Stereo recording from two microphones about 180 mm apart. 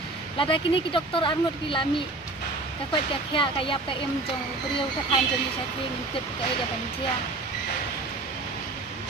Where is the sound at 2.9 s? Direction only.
30° left (ahead or behind).